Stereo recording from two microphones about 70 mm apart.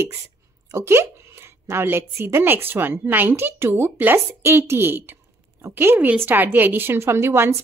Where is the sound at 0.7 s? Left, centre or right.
Right.